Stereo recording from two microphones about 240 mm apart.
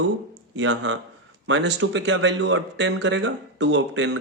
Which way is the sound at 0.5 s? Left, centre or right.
Right.